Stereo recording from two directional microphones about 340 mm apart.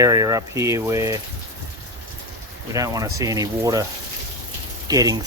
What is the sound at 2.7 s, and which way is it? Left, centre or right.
Speech, centre.